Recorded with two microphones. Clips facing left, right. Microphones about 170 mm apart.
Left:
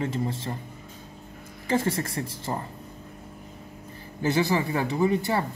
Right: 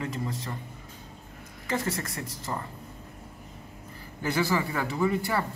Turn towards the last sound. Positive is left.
turn(degrees=25)  # may be behind; listen again after turning